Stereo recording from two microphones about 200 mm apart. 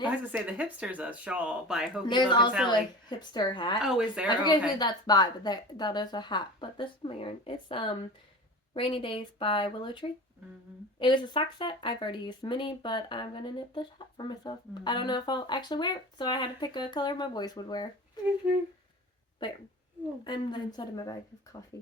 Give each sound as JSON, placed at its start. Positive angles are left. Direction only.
{"t": 0.1, "sound": "speech", "side_deg": -10}
{"t": 2.0, "sound": "speech", "side_deg": 25}
{"t": 3.8, "sound": "speech", "side_deg": -5}
{"t": 4.3, "sound": "speech", "side_deg": 20}
{"t": 18.4, "sound": "speech", "side_deg": -5}
{"t": 20.2, "sound": "speech", "side_deg": 20}